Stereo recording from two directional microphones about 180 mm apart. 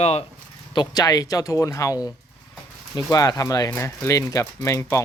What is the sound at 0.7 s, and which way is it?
A man's voice, 25° left (ahead or behind).